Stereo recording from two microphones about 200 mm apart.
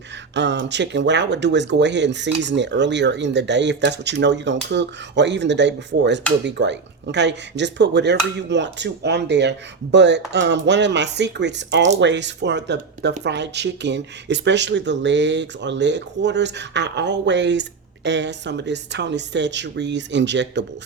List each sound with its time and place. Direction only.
0.3 s speech: 60° right (ahead or behind)